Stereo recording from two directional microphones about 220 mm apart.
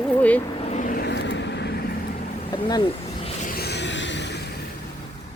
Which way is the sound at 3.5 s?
45° left (ahead or behind).